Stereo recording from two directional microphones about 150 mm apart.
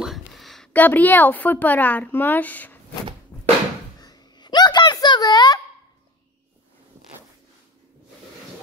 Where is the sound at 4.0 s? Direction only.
30° left (ahead or behind).